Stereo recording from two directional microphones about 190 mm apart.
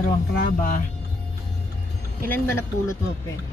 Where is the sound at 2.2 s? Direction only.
10° left (ahead or behind).